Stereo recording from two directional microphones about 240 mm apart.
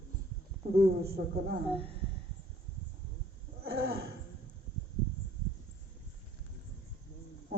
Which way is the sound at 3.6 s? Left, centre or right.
Right.